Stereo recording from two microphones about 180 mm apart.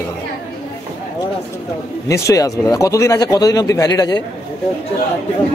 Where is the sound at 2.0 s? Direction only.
15° left (ahead or behind).